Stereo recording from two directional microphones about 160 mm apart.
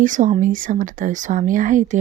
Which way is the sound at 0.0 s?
50° right (ahead or behind).